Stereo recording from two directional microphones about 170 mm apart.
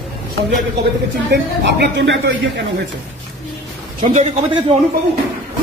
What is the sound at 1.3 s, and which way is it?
Speech, 80° right.